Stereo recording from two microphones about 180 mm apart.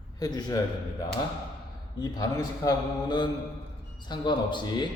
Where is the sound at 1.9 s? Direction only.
20° left (ahead or behind).